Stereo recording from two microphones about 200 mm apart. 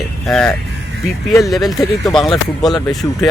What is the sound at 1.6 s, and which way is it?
Speech, 15° left (ahead or behind).